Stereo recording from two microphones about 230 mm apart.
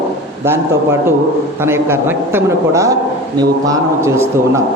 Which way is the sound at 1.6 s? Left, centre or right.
Centre.